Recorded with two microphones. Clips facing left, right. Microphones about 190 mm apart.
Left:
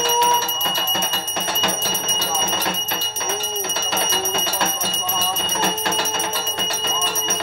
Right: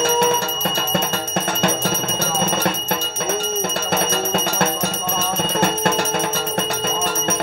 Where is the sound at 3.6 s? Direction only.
50° right (ahead or behind).